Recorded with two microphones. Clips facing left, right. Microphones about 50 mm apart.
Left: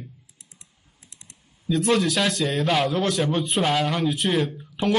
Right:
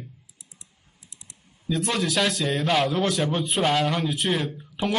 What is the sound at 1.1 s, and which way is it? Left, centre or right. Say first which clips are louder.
Typing: even; left.